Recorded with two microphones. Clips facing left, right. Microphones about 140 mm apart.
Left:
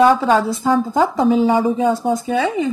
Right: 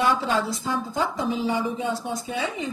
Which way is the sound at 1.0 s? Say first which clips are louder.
Left 10 dB; 50° left (ahead or behind).